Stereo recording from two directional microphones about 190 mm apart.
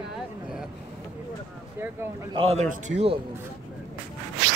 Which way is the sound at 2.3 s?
30° right (ahead or behind).